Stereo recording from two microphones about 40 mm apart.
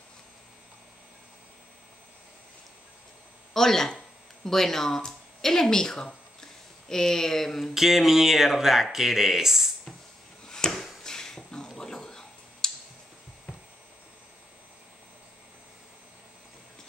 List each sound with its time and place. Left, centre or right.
3.5 s speech: centre
7.7 s speech: centre
10.4 s a sound: centre